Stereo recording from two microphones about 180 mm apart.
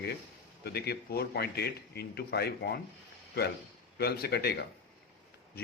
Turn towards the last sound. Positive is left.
turn(degrees=65)  # may be behind; listen again after turning